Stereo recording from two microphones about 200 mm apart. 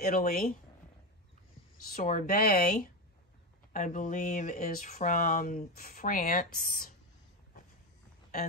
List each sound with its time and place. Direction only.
0.0 s speech: 45° left (ahead or behind)
2.0 s speech: 45° left (ahead or behind)